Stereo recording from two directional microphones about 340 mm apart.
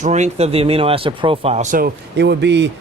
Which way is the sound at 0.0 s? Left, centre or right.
Centre.